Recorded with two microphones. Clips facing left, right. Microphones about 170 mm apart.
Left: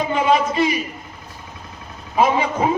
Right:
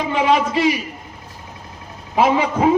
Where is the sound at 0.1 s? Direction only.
75° right (ahead or behind).